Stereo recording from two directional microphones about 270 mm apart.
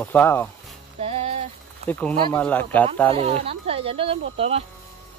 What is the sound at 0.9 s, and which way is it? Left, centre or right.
Music, right.